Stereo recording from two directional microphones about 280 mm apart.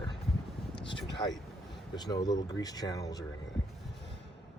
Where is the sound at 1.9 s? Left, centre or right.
Centre.